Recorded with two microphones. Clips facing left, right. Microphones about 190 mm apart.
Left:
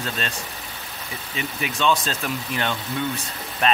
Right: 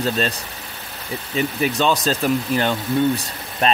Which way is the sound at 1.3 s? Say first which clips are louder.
Right 9 dB; 40° right (ahead or behind).